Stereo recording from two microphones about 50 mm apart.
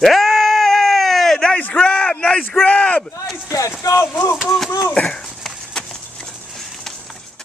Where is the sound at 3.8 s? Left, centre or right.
Left.